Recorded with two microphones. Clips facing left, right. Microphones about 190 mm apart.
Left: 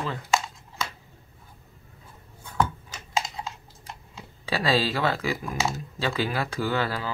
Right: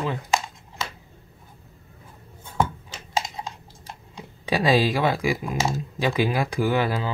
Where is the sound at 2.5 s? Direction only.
25° right (ahead or behind).